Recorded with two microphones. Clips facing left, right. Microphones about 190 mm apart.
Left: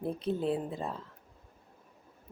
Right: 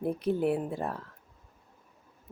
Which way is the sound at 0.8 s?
65° right (ahead or behind).